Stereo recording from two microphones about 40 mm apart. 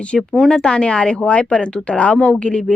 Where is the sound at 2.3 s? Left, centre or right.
Left.